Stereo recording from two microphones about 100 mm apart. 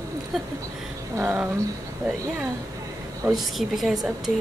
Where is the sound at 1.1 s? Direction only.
20° right (ahead or behind).